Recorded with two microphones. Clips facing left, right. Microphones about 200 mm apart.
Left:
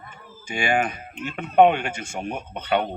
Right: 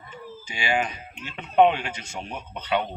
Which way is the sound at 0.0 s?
50° left (ahead or behind).